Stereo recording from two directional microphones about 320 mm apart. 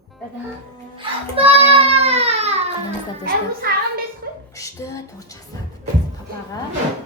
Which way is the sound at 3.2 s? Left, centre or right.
Right.